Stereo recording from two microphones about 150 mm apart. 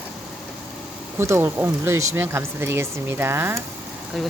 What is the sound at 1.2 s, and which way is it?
Speech, 15° right (ahead or behind).